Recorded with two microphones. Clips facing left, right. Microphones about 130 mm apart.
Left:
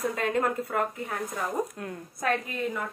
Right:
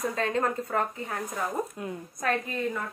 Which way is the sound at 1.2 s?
10° right (ahead or behind).